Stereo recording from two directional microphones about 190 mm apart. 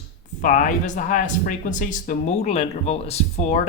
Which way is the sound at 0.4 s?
45° left (ahead or behind).